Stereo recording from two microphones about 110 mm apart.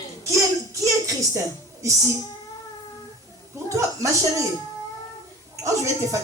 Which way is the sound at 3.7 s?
30° right (ahead or behind).